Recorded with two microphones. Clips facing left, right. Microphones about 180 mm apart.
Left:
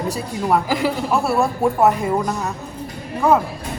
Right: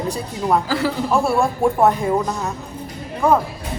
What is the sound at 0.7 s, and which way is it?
Speech, 15° left (ahead or behind).